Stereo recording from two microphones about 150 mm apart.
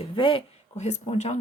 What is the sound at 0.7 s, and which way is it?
Speech, 50° left (ahead or behind).